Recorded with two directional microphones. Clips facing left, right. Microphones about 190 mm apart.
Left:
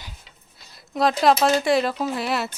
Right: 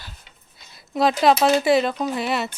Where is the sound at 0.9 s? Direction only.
Centre (ahead or behind).